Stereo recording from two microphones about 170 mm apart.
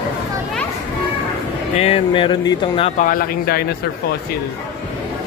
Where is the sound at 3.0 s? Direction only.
55° left (ahead or behind).